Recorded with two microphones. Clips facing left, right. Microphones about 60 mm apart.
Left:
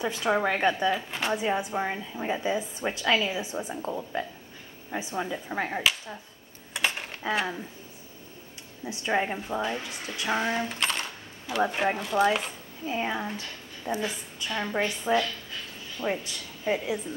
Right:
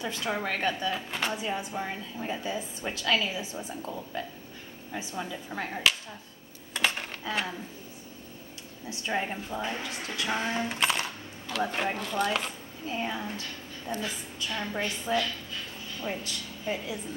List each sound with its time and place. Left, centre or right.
0.0 s a woman's voice: left
0.9 s speech: centre
1.3 s a woman's voice: left
6.7 s cutlery: centre
8.8 s a woman's voice: centre
10.7 s coin: centre
11.5 s a woman's voice: centre
12.9 s a woman's voice: left
16.0 s a woman's voice: left